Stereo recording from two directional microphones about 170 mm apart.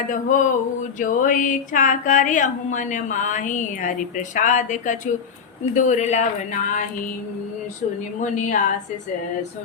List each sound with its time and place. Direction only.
0.1 s speech: 50° left (ahead or behind)
8.2 s speech: 45° left (ahead or behind)